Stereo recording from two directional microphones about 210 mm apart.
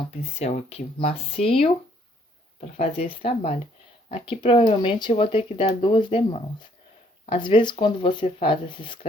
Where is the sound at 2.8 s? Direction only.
25° left (ahead or behind).